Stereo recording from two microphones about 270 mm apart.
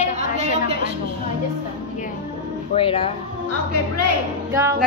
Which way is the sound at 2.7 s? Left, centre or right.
Centre.